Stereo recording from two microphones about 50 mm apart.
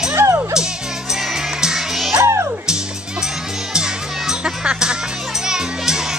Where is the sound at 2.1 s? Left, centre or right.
Right.